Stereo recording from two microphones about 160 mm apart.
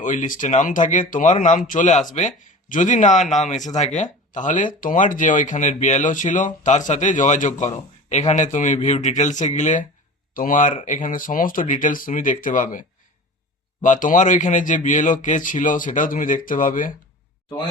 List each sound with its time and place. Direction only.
0.0 s speech: 50° left (ahead or behind)
13.8 s speech: 55° left (ahead or behind)